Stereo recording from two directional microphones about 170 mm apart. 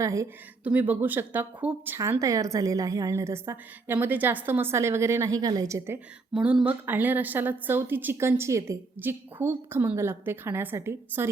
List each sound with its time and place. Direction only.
0.0 s a woman's voice: 20° right (ahead or behind)
6.3 s speech: 5° right (ahead or behind)